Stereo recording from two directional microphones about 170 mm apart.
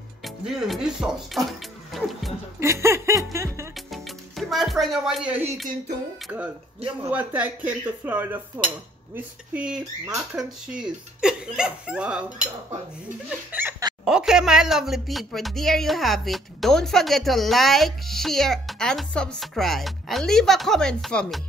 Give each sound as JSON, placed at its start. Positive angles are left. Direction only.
{"t": 0.2, "sound": "speech", "side_deg": 0}
{"t": 2.6, "sound": "speech", "side_deg": -15}
{"t": 3.3, "sound": "music", "side_deg": -15}
{"t": 3.9, "sound": "music", "side_deg": 0}
{"t": 6.2, "sound": "speech", "side_deg": -10}
{"t": 13.5, "sound": "a sound", "side_deg": -10}
{"t": 14.0, "sound": "speech", "side_deg": -5}